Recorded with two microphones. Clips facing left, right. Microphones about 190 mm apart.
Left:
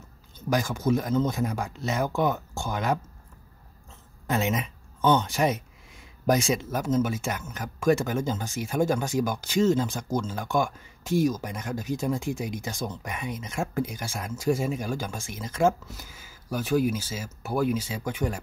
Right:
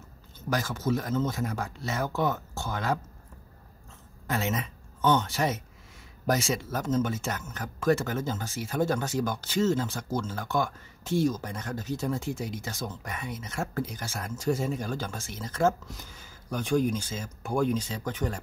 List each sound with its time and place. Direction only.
0.5 s speech: 15° left (ahead or behind)
4.3 s speech: 15° left (ahead or behind)